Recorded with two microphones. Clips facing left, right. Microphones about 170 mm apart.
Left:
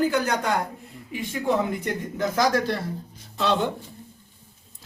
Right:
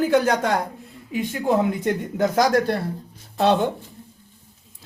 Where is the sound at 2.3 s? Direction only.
55° right (ahead or behind).